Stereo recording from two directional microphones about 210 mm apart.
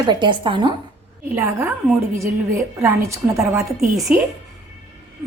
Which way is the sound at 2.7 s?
15° right (ahead or behind).